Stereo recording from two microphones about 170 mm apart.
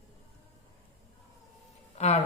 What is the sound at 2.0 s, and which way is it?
Speech, 40° left (ahead or behind).